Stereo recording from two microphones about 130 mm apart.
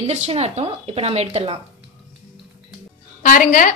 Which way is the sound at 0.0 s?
50° right (ahead or behind).